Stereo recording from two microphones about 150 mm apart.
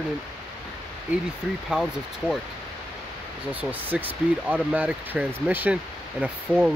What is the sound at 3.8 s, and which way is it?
Speech, 10° right (ahead or behind).